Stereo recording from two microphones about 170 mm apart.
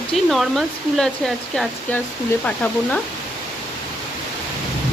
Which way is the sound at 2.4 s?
10° left (ahead or behind).